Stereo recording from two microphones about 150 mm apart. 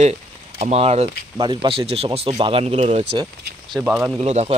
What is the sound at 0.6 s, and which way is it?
Speech, 45° right (ahead or behind).